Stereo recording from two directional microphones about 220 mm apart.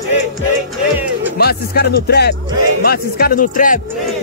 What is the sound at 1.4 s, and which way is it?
Speech, 45° left (ahead or behind).